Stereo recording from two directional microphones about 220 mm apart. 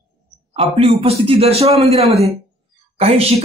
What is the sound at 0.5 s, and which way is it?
A man's voice, 25° right (ahead or behind).